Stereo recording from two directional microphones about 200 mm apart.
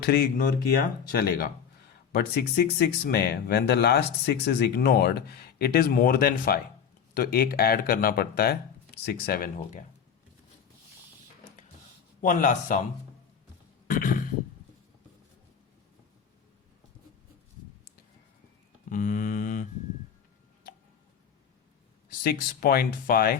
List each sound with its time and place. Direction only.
0.0 s speech: 50° left (ahead or behind)
12.2 s speech: 40° left (ahead or behind)
13.8 s a sound: 45° left (ahead or behind)
18.9 s mantra: 40° left (ahead or behind)
22.2 s speech: 50° left (ahead or behind)